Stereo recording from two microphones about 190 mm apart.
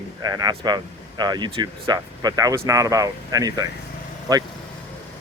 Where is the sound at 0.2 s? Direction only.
20° right (ahead or behind).